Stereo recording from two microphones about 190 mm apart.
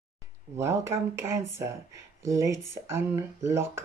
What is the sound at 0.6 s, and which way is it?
Speech, 15° right (ahead or behind).